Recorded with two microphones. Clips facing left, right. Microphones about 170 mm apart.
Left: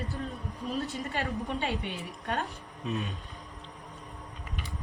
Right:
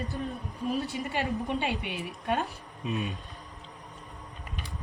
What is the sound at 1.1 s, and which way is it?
A woman's voice, 10° right (ahead or behind).